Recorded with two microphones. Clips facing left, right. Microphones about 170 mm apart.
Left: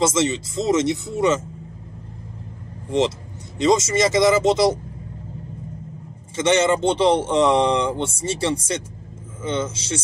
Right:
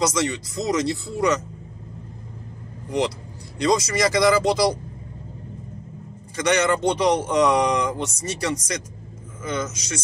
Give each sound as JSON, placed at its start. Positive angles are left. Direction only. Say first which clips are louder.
{"t": 0.0, "sound": "a man's voice", "louder": "left 3 dB", "side_deg": 25}
{"t": 3.5, "sound": "a man's voice", "louder": "left 3 dB", "side_deg": 25}
{"t": 6.3, "sound": "a man's voice", "louder": "left 3 dB", "side_deg": 25}